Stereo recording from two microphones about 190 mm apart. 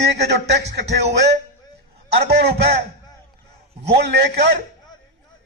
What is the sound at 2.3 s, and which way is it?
Speech, 60° right (ahead or behind).